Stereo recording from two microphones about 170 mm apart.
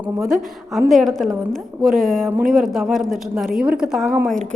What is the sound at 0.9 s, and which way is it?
A woman's voice, centre (ahead or behind).